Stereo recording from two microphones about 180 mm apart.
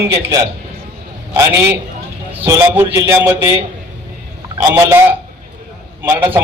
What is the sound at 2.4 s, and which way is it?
A man's voice, 15° right (ahead or behind).